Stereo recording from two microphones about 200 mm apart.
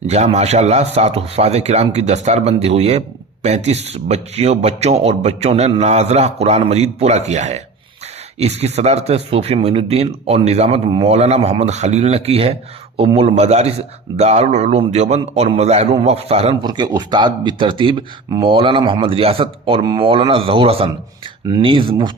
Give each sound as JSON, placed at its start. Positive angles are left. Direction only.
{"t": 0.1, "sound": "a man's voice", "side_deg": -35}